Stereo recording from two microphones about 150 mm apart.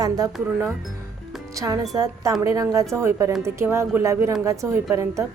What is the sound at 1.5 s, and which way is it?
A woman's voice, 25° right (ahead or behind).